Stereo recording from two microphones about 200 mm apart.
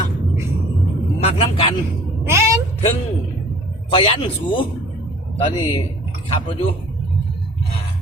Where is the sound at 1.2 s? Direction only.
30° left (ahead or behind).